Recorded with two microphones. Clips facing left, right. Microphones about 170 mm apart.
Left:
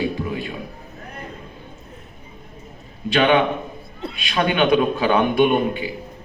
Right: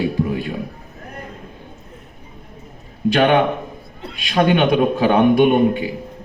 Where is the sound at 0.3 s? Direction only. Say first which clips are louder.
Right 4 dB; 55° right (ahead or behind).